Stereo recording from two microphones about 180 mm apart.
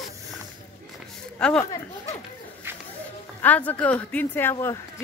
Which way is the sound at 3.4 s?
10° left (ahead or behind).